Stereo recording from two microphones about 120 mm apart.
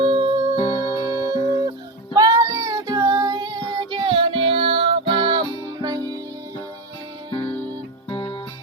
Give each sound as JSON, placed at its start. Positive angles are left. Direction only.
{"t": 0.0, "sound": "music", "side_deg": -45}
{"t": 0.5, "sound": "music", "side_deg": 40}
{"t": 2.1, "sound": "music", "side_deg": -35}
{"t": 8.1, "sound": "music", "side_deg": 45}